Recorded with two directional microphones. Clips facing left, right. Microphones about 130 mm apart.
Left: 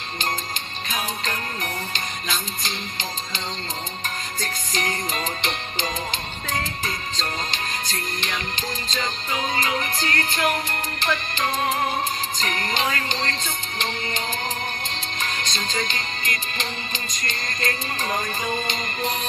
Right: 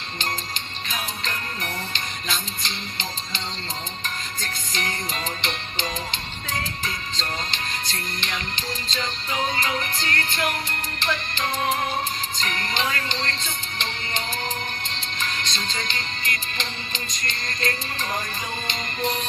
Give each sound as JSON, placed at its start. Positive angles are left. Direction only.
{"t": 1.2, "sound": "music", "side_deg": 45}
{"t": 12.4, "sound": "music", "side_deg": 45}